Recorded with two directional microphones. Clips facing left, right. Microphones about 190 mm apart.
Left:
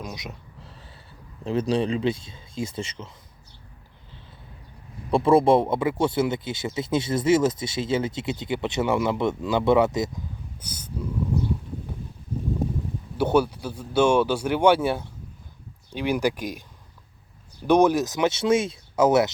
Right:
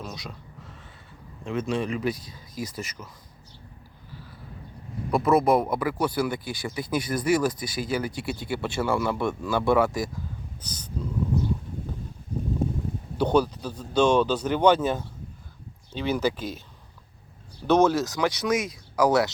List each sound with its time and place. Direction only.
0.0 s a sound: 15° left (ahead or behind)
1.5 s speech: 35° left (ahead or behind)
4.1 s a sound: 25° left (ahead or behind)
5.1 s speech: 30° left (ahead or behind)
10.6 s speech: 10° left (ahead or behind)
13.1 s speech: 10° left (ahead or behind)
17.7 s speech: 15° left (ahead or behind)